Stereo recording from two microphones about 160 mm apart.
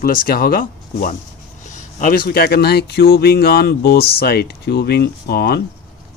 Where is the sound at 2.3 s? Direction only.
70° left (ahead or behind).